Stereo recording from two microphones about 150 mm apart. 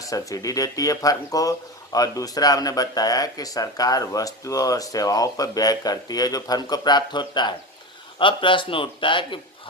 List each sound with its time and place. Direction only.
0.0 s a man's voice: 20° left (ahead or behind)